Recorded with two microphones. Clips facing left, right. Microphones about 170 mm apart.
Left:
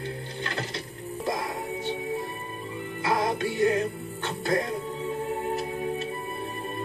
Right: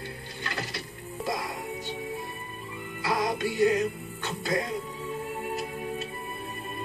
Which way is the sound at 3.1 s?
55° left (ahead or behind).